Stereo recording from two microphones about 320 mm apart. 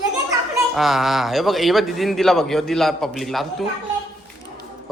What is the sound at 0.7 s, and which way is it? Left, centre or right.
Speech, centre.